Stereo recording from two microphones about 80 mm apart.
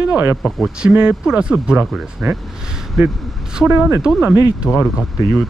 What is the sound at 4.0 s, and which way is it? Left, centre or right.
Speech, centre.